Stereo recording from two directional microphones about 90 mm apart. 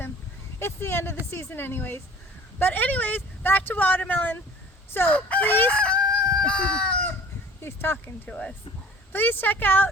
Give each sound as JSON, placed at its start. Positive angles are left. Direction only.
{"t": 0.6, "sound": "speech", "side_deg": 25}
{"t": 4.9, "sound": "crowing", "side_deg": 20}
{"t": 7.6, "sound": "speech", "side_deg": 25}
{"t": 8.3, "sound": "speech", "side_deg": 10}